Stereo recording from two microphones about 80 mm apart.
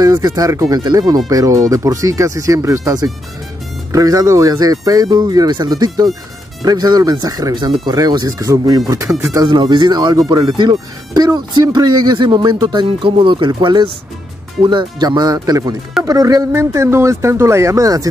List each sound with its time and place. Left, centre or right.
0.0 s speech: right
9.4 s speech: right
10.7 s speech: right
13.5 s speech: right
16.5 s speech: right